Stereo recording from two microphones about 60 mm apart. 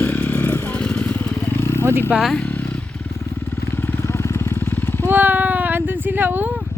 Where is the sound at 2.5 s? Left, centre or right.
Left.